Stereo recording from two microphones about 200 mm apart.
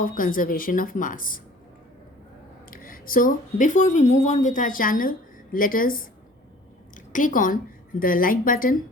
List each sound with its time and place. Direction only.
0.0 s speech: 45° left (ahead or behind)
2.6 s a woman's voice: 45° left (ahead or behind)